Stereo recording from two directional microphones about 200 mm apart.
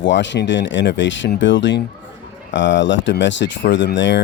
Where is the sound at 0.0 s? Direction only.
65° left (ahead or behind).